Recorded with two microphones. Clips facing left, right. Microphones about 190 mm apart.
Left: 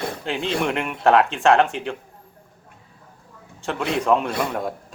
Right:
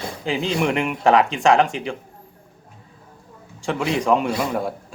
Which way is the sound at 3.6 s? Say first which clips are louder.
Right 2 dB; centre (ahead or behind).